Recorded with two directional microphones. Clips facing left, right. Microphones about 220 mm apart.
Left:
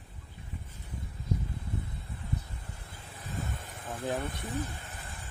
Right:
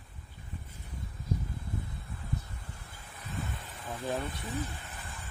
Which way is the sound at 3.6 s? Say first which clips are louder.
Left 1 dB; 45° left (ahead or behind).